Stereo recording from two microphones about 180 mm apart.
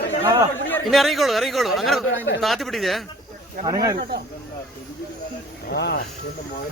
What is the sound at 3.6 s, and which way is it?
Speech, 20° right (ahead or behind).